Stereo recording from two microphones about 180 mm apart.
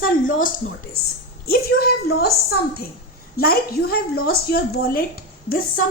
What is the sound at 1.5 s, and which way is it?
Speech, 60° left (ahead or behind).